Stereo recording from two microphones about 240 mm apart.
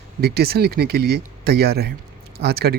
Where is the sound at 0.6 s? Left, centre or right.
Right.